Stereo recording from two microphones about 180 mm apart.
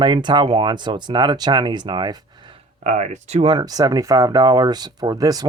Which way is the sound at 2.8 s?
40° right (ahead or behind).